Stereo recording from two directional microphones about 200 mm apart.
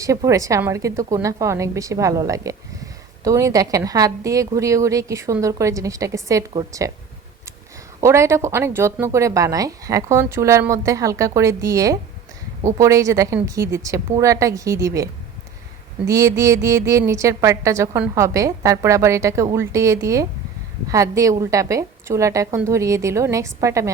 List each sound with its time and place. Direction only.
0.0 s a woman's voice: 15° right (ahead or behind)
8.0 s a woman's voice: 15° right (ahead or behind)